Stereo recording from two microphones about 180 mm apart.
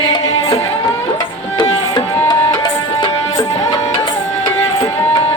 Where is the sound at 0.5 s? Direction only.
35° left (ahead or behind).